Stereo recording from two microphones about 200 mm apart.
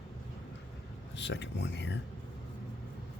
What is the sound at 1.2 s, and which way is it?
Speech, 60° left (ahead or behind).